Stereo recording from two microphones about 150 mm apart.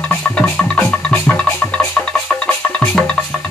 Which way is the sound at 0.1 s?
10° left (ahead or behind).